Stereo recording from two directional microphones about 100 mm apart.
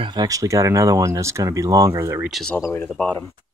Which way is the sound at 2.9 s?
15° left (ahead or behind).